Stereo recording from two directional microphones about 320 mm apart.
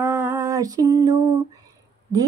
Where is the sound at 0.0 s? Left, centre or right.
Centre.